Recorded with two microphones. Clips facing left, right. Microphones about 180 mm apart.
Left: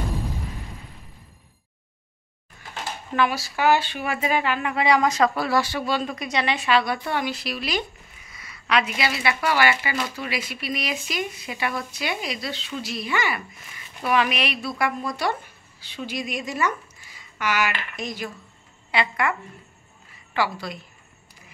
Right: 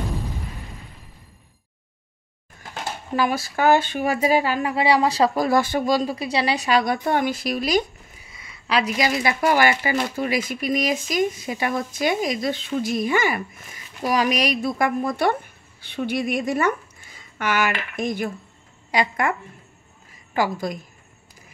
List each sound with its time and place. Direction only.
3.2 s a woman's voice: 45° right (ahead or behind)
8.3 s a woman's voice: 25° right (ahead or behind); by 18.3 s 55° right (ahead or behind)
18.9 s speech: 45° right (ahead or behind)
20.3 s a woman's voice: 45° right (ahead or behind)